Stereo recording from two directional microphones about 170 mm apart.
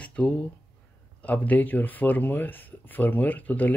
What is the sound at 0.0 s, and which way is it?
Speech, 5° left (ahead or behind).